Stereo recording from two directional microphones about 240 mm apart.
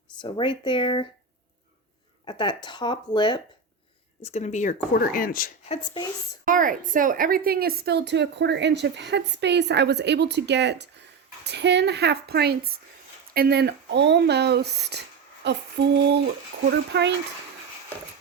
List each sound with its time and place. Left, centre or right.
0.2 s speech: centre
2.2 s speech: centre; by 5.7 s left
5.7 s speech: centre
6.4 s a woman's voice: right
16.9 s a woman's voice: right